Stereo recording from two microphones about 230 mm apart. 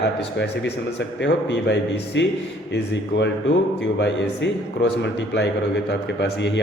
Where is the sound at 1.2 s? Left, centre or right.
Left.